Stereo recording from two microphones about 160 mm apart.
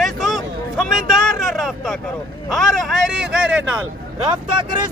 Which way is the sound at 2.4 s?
Centre (ahead or behind).